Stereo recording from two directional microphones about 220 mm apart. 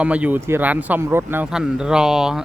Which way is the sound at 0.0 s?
5° right (ahead or behind).